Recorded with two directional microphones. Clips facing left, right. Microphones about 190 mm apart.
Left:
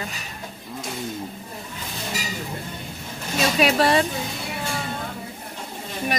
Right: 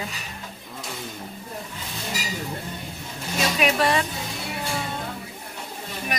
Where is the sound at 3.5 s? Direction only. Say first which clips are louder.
Left 3 dB; 35° left (ahead or behind).